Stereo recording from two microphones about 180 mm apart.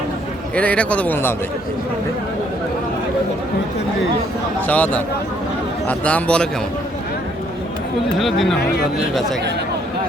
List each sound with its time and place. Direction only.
0.5 s speech: 5° left (ahead or behind)
4.6 s speech: 10° left (ahead or behind)
5.9 s speech: 5° left (ahead or behind)
8.2 s speech: centre (ahead or behind)